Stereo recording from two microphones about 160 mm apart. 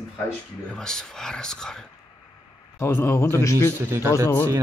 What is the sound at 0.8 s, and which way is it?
Speech, 5° left (ahead or behind).